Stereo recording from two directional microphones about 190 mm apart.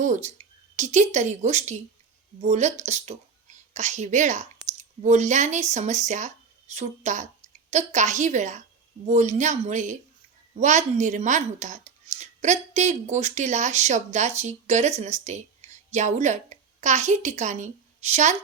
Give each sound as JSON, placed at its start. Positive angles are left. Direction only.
{"t": 0.0, "sound": "speech", "side_deg": -40}